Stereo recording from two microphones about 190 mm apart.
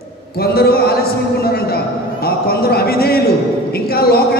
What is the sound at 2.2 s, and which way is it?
A man's voice, 55° left (ahead or behind).